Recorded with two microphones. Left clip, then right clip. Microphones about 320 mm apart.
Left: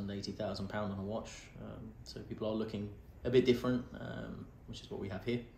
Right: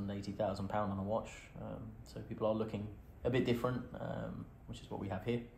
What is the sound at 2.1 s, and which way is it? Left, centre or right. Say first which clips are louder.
Speech: right 2 dB; right.